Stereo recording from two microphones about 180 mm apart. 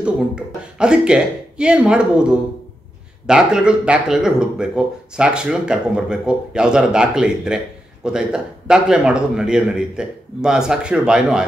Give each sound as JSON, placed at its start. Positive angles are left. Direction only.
{"t": 0.0, "sound": "speech", "side_deg": -5}